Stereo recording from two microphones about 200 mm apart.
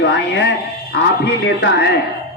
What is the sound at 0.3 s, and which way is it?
A man's voice, 60° left (ahead or behind).